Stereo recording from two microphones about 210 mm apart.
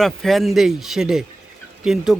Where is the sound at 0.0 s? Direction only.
Centre (ahead or behind).